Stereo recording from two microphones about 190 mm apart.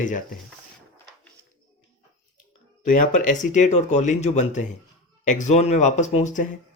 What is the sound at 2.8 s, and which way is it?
Speech, 45° left (ahead or behind).